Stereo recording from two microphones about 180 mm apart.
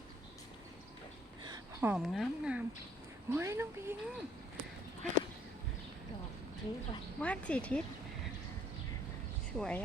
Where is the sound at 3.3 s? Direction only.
15° right (ahead or behind).